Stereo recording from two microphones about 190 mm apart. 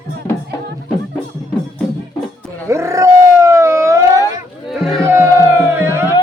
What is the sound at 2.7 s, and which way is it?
Howl, 15° right (ahead or behind).